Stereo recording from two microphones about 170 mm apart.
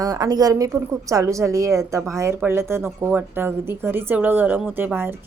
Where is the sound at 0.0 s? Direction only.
20° right (ahead or behind).